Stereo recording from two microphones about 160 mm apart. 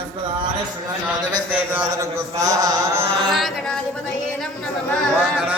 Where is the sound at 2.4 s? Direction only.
20° right (ahead or behind).